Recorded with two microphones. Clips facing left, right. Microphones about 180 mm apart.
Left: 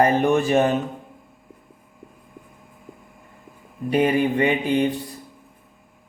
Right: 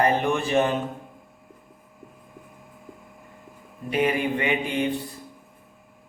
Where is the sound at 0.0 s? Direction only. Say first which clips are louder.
Left 4 dB; 45° left (ahead or behind).